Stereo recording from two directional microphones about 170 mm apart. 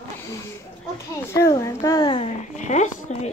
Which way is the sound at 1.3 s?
20° left (ahead or behind).